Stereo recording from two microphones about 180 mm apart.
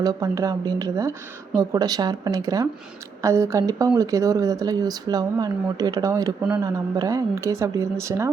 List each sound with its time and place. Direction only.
0.0 s speech: 20° right (ahead or behind)